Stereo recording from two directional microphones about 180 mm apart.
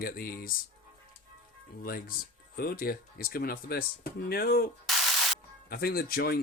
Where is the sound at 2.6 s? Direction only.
55° left (ahead or behind).